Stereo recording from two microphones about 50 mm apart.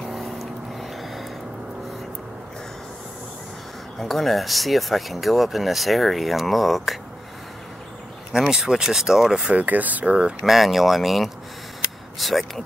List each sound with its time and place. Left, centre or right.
0.1 s vehicle: centre
4.0 s speech: centre
8.3 s speech: centre
9.4 s speech: right
10.4 s speech: centre